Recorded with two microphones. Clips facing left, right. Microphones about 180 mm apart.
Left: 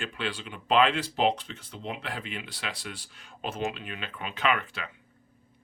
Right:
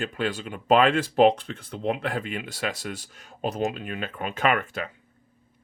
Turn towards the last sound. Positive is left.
turn(degrees=-45)  # may be behind; listen again after turning